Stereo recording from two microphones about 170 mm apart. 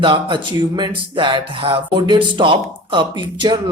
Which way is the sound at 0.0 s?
30° right (ahead or behind).